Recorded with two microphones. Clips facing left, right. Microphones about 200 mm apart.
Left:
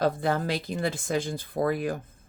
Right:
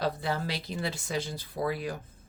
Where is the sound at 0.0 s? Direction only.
50° left (ahead or behind).